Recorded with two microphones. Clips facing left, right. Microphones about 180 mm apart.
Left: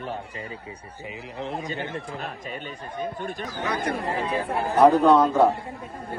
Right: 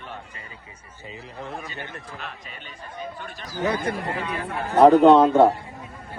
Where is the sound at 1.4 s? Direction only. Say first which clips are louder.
Left 5 dB; 25° left (ahead or behind).